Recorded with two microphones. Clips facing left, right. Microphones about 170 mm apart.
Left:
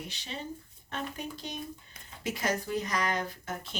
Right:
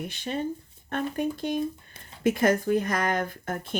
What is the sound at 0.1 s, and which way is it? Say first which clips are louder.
Speech: right 10 dB; 50° right (ahead or behind).